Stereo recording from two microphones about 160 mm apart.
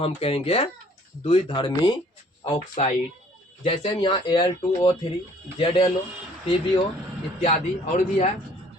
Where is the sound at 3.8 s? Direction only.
30° left (ahead or behind).